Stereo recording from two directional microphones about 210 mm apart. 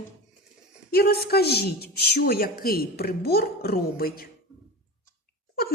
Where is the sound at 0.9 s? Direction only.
45° left (ahead or behind).